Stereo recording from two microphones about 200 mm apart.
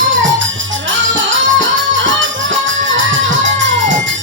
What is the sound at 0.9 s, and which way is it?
Music, 70° right (ahead or behind).